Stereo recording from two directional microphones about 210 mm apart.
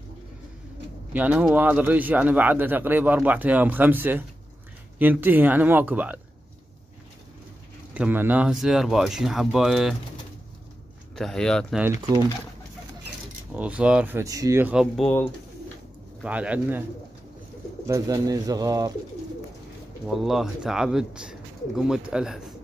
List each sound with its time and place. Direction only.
1.1 s speech: 5° right (ahead or behind)
7.9 s speech: 10° right (ahead or behind)
11.1 s speech: 5° left (ahead or behind)
11.8 s speech: 15° right (ahead or behind)
13.5 s speech: 5° right (ahead or behind)
16.2 s speech: 5° right (ahead or behind)
17.8 s speech: 15° right (ahead or behind)
20.1 s speech: centre (ahead or behind)